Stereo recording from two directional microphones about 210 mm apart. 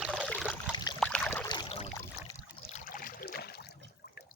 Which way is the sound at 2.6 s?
35° left (ahead or behind).